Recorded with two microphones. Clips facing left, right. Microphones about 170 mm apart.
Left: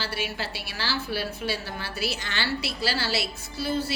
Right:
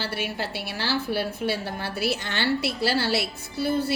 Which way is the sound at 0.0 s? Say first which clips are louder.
Right 2 dB; 55° right (ahead or behind).